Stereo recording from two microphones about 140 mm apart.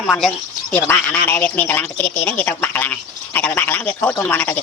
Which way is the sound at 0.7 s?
15° left (ahead or behind).